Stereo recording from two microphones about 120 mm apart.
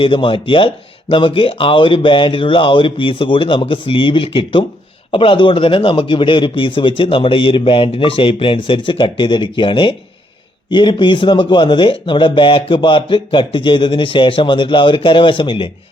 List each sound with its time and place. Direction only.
0.0 s a man's voice: 45° left (ahead or behind)